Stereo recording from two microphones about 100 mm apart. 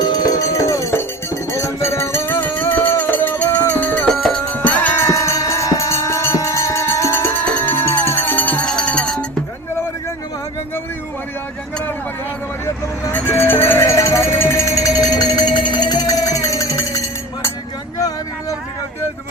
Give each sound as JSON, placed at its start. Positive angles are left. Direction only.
{"t": 0.0, "sound": "music", "side_deg": 40}
{"t": 4.1, "sound": "music", "side_deg": 5}
{"t": 4.5, "sound": "music", "side_deg": 15}
{"t": 5.0, "sound": "music", "side_deg": 30}
{"t": 12.6, "sound": "vehicle", "side_deg": 20}
{"t": 17.9, "sound": "a sound", "side_deg": 35}